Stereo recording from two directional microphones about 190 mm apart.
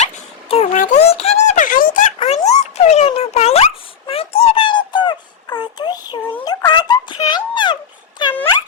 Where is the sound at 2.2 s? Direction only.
35° left (ahead or behind).